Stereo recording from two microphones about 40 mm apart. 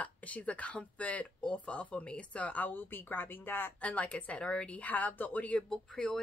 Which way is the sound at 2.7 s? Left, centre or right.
Left.